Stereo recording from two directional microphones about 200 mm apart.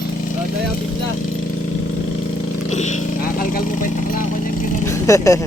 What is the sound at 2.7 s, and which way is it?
Vehicle, 35° left (ahead or behind).